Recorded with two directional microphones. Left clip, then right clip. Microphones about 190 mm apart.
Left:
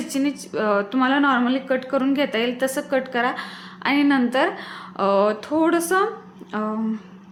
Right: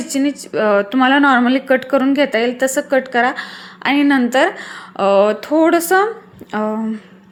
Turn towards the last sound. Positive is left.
turn(degrees=-20)  # may be behind; listen again after turning